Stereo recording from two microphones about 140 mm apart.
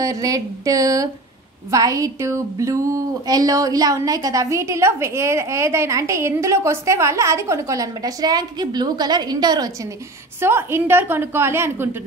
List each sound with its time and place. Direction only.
0.0 s a woman's voice: 25° right (ahead or behind)
10.4 s a woman's voice: 15° right (ahead or behind)